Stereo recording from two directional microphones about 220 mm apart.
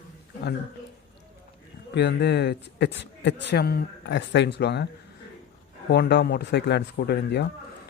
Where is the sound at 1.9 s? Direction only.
50° left (ahead or behind).